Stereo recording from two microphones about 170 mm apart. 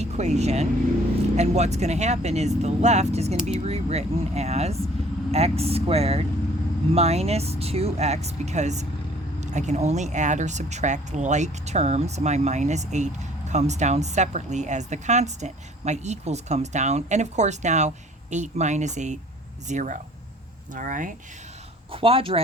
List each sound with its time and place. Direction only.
0.0 s speech: 40° right (ahead or behind)
21.9 s speech: 35° right (ahead or behind)